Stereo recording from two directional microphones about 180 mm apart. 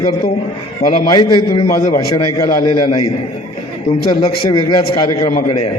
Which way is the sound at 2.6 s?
25° left (ahead or behind).